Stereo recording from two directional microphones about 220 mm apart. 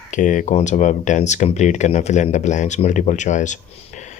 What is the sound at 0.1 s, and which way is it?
Speech, 35° left (ahead or behind).